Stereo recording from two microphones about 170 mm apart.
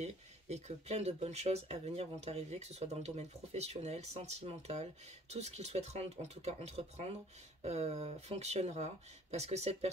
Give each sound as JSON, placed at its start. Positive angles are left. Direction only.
{"t": 0.0, "sound": "speech", "side_deg": -40}